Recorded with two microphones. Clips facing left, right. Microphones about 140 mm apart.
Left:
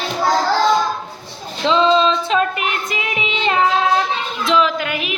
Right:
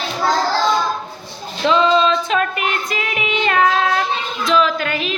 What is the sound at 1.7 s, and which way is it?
Music, 25° left (ahead or behind).